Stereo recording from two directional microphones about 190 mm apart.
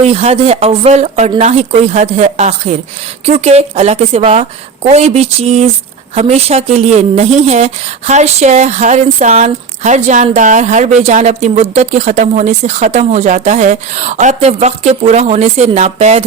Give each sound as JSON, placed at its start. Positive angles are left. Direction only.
{"t": 0.0, "sound": "a woman's voice", "side_deg": -35}